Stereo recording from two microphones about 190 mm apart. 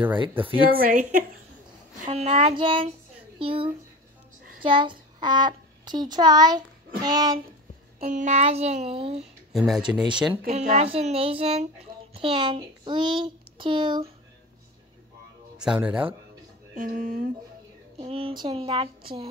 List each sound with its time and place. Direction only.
0.7 s a woman's voice: 50° right (ahead or behind)
2.0 s a child's voice: 30° right (ahead or behind)
8.0 s child singing: 40° right (ahead or behind)
9.5 s speech: centre (ahead or behind)
10.3 s a child's voice: 40° right (ahead or behind)
15.5 s speech: 5° right (ahead or behind)
16.7 s speech: 50° right (ahead or behind)
17.9 s a child's voice: 30° right (ahead or behind)